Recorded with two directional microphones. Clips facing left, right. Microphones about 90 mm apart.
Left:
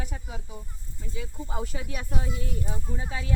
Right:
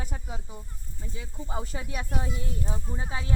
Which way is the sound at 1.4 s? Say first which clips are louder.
Right 1 dB; 30° right (ahead or behind).